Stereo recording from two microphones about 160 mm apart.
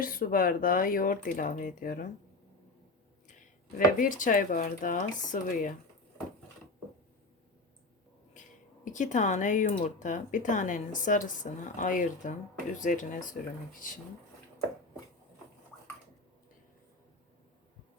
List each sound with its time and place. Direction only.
0.0 s speech: 65° left (ahead or behind)
3.8 s speech: 55° left (ahead or behind)
8.8 s speech: 50° left (ahead or behind)